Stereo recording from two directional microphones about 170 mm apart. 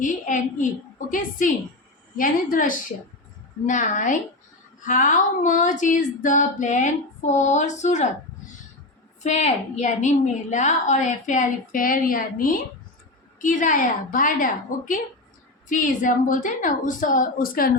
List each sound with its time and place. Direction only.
0.0 s a woman's voice: 45° left (ahead or behind)
9.2 s a woman's voice: 40° left (ahead or behind); by 17.7 s 60° left (ahead or behind)